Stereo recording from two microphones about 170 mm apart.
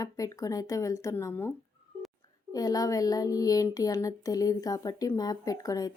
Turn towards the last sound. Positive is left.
turn(degrees=20)  # may be behind; listen again after turning